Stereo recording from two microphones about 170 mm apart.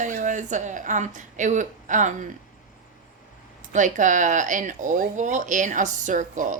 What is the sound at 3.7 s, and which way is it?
Speech, 45° right (ahead or behind).